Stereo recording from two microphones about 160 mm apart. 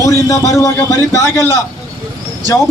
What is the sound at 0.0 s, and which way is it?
A man's voice, 20° left (ahead or behind).